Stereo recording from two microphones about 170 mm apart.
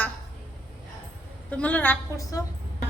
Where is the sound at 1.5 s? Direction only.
10° left (ahead or behind).